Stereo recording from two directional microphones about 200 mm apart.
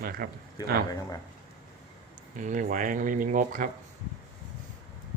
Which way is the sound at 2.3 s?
40° right (ahead or behind).